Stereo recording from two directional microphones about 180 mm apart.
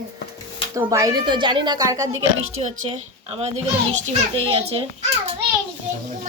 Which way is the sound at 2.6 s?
40° right (ahead or behind).